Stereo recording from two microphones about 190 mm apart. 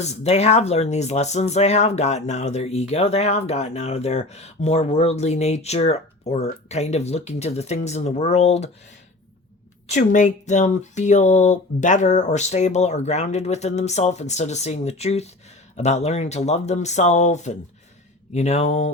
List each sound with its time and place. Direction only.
0.0 s speech: 35° left (ahead or behind)
9.8 s speech: 40° left (ahead or behind)